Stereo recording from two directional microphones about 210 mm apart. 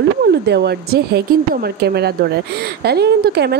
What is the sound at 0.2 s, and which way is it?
Speech, 50° right (ahead or behind).